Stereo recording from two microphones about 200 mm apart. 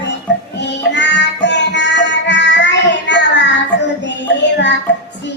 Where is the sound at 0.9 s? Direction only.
60° left (ahead or behind).